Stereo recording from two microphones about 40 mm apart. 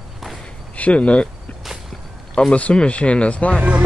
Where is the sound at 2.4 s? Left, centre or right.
Left.